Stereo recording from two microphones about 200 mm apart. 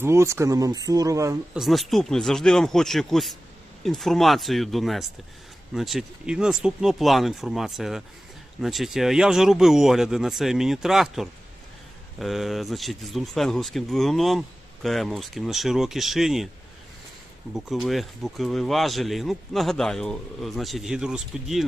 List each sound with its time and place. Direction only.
0.0 s speech: 15° right (ahead or behind)
1.5 s speech: centre (ahead or behind)
17.5 s speech: centre (ahead or behind)